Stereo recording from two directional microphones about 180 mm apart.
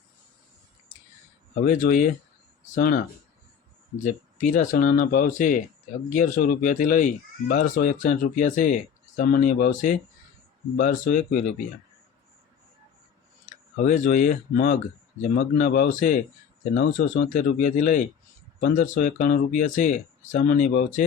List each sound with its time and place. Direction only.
1.6 s speech: 45° left (ahead or behind)
4.0 s speech: 50° left (ahead or behind)
13.4 s speech: 45° left (ahead or behind)
16.7 s speech: 80° left
17.2 s speech: 45° left (ahead or behind)